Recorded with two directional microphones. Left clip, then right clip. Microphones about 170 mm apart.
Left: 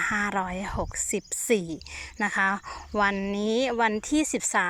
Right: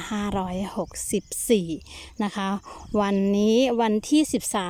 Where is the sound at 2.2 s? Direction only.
30° right (ahead or behind).